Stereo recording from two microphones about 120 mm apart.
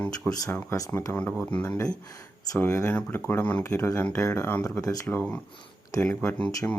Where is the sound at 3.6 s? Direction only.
25° left (ahead or behind).